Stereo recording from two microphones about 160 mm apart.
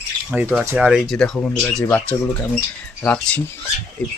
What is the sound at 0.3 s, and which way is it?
Speech, 5° right (ahead or behind).